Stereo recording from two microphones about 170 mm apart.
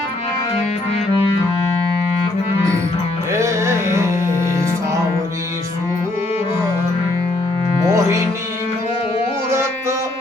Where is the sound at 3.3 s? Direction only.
15° right (ahead or behind).